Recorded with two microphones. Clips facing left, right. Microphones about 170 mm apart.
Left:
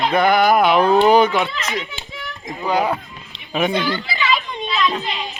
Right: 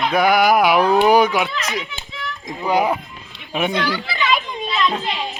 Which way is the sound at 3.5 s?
5° right (ahead or behind).